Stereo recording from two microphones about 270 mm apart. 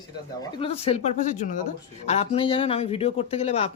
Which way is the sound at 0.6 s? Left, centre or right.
Left.